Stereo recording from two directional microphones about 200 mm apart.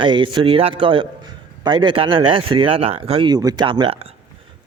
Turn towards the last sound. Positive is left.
turn(degrees=-30)  # may be behind; listen again after turning